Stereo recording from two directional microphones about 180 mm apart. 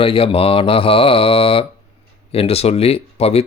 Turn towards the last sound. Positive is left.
turn(degrees=35)  # may be behind; listen again after turning